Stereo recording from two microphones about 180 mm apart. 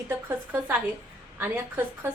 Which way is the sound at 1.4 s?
10° right (ahead or behind).